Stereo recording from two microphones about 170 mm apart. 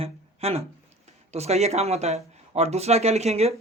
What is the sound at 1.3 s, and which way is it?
Speech, 40° right (ahead or behind).